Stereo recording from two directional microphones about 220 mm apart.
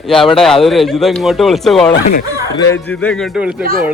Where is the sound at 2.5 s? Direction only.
15° left (ahead or behind).